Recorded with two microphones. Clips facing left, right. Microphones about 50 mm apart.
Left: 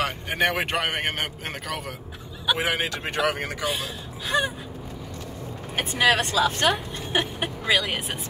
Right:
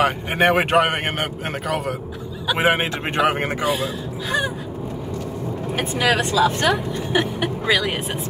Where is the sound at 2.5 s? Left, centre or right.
Right.